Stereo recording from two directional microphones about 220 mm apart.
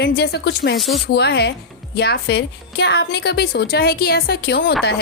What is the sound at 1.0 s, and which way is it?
A woman's voice, 45° left (ahead or behind).